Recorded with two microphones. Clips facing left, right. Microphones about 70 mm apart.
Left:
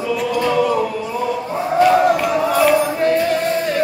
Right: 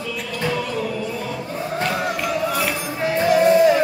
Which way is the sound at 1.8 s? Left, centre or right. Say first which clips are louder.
Left 12 dB; centre.